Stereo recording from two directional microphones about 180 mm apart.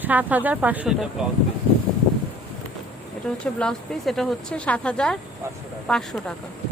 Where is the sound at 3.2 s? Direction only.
5° left (ahead or behind).